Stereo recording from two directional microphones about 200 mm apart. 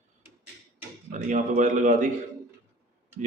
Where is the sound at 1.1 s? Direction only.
40° right (ahead or behind).